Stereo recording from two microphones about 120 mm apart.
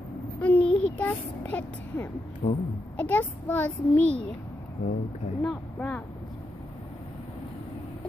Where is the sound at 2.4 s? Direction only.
90° left.